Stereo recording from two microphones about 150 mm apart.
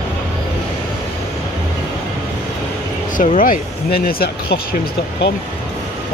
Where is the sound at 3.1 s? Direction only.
60° left (ahead or behind); by 4.8 s 85° left.